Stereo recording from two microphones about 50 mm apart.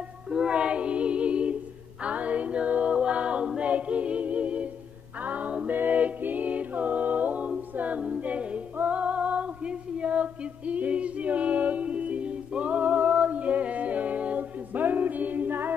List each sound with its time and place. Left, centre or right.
0.3 s music: centre
7.7 s a capella: right
8.7 s female singing: right
10.7 s a capella: right